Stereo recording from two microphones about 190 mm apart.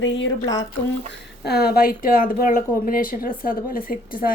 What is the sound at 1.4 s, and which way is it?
Speech, 55° left (ahead or behind).